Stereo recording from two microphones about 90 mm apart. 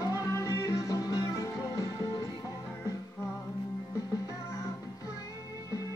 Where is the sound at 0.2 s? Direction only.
35° left (ahead or behind).